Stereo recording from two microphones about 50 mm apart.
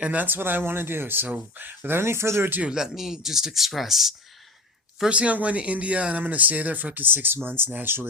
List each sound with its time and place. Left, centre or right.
0.0 s speech: right
0.3 s speech: right
2.0 s speech: right
2.7 s speech: centre
5.0 s speech: right